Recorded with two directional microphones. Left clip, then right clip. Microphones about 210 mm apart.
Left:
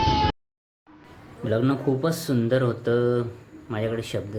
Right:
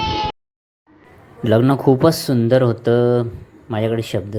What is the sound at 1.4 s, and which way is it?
Speech, 30° right (ahead or behind).